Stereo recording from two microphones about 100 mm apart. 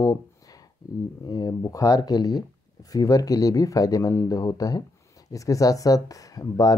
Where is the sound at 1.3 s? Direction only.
40° left (ahead or behind).